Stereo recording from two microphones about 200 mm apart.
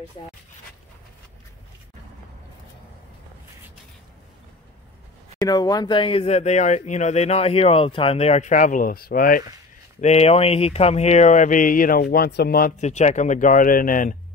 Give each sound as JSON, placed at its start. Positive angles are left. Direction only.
{"t": 5.4, "sound": "speech", "side_deg": 20}
{"t": 9.9, "sound": "speech", "side_deg": 35}
{"t": 12.8, "sound": "speech", "side_deg": 35}